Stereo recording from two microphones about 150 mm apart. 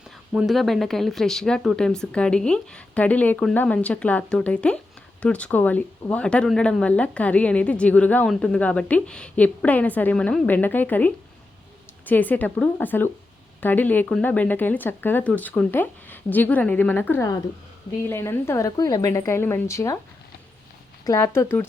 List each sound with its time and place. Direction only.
0.3 s a woman's voice: centre (ahead or behind); by 20.0 s 20° left (ahead or behind)
21.0 s speech: 20° left (ahead or behind)